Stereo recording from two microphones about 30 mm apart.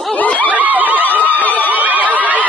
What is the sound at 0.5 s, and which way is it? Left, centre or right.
Neigh, right.